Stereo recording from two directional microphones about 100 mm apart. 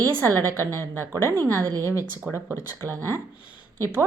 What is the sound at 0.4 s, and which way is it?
Speech, 30° right (ahead or behind).